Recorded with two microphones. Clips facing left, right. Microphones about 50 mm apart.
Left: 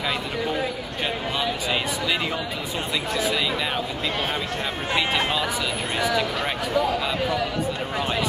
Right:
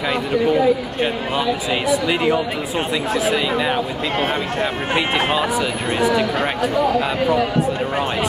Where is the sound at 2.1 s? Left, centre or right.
Right.